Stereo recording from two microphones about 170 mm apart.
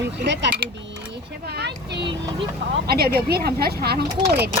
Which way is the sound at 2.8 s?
65° right (ahead or behind).